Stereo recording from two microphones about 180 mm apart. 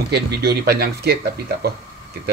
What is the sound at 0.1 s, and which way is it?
Speech, 65° right (ahead or behind).